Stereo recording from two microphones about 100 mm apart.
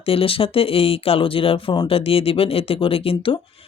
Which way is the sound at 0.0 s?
70° left (ahead or behind).